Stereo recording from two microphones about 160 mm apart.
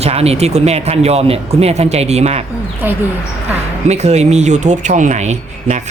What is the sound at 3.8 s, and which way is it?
Speech, 45° right (ahead or behind).